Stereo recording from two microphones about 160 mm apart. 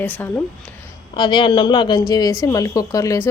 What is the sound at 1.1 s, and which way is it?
A woman's voice, 30° left (ahead or behind).